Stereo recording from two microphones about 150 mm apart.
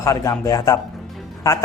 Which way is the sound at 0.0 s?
20° left (ahead or behind).